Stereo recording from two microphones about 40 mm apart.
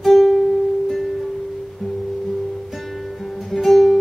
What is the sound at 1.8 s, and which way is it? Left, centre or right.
Music, centre.